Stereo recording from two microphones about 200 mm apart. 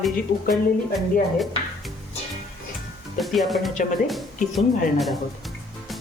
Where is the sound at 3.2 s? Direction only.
Centre (ahead or behind).